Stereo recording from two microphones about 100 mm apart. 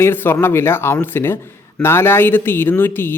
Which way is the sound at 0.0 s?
20° left (ahead or behind).